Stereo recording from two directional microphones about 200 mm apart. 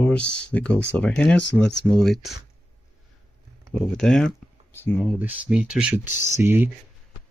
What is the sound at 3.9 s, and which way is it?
Speech, 5° left (ahead or behind).